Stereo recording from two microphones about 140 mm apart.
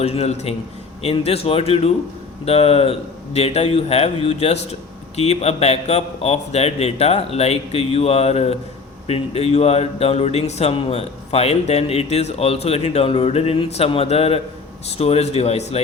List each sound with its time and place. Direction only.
0.0 s speech: 45° left (ahead or behind)